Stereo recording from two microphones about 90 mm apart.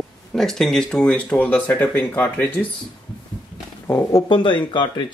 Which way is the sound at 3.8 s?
25° left (ahead or behind).